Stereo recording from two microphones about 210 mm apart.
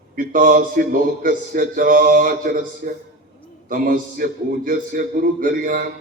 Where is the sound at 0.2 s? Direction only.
40° right (ahead or behind).